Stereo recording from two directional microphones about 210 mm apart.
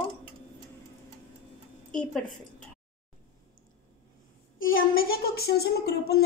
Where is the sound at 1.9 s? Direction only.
5° left (ahead or behind).